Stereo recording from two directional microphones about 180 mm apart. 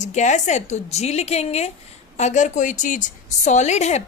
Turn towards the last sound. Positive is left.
turn(degrees=40)  # may be behind; listen again after turning